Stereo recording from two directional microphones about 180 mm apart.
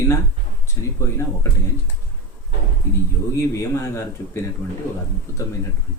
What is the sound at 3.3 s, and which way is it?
Speech, 15° left (ahead or behind).